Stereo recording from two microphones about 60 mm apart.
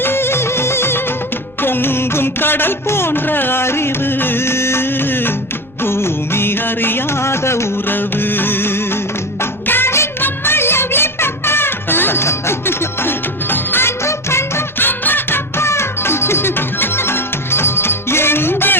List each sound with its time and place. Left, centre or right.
0.0 s music: left
7.9 s music: left
14.8 s music: left